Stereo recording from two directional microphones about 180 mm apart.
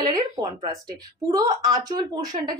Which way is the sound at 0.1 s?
25° right (ahead or behind).